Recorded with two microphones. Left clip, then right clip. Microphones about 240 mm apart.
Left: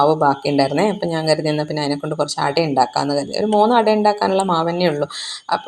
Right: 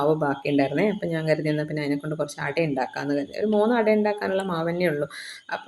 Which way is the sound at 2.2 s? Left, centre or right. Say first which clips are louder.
Left 9 dB; left.